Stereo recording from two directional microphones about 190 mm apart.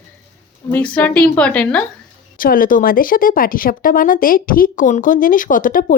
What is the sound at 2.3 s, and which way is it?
Speech, 45° left (ahead or behind).